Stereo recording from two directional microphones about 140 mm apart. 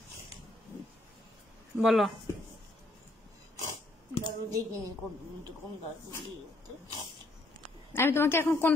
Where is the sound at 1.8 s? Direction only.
Centre (ahead or behind).